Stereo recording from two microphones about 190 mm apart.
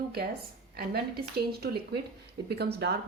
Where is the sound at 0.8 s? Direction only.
55° right (ahead or behind).